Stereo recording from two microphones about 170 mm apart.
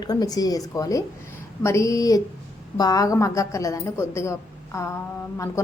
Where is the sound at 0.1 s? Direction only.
20° left (ahead or behind).